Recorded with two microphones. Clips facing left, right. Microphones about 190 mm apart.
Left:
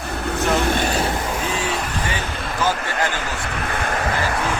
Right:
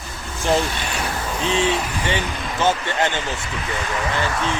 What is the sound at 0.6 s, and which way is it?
Vehicle, 50° left (ahead or behind).